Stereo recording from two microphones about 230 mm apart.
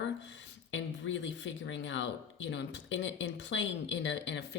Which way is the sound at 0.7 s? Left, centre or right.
Left.